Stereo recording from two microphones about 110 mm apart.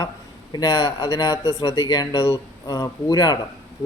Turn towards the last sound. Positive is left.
turn(degrees=35)  # may be behind; listen again after turning